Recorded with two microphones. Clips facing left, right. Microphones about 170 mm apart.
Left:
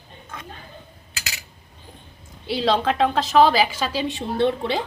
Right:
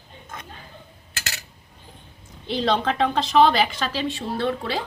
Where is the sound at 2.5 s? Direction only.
5° left (ahead or behind); by 4.8 s 20° left (ahead or behind).